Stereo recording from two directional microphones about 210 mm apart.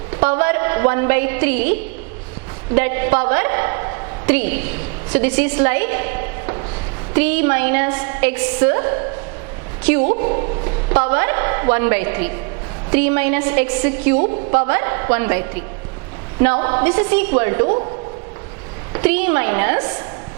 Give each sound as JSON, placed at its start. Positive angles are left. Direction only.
{"t": 0.2, "sound": "a woman's voice", "side_deg": -10}
{"t": 18.9, "sound": "a woman's voice", "side_deg": -10}